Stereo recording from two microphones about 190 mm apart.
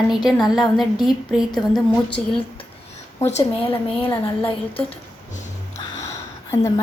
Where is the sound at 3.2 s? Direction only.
35° left (ahead or behind).